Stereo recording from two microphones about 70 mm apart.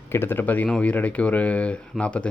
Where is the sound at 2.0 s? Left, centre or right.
Centre.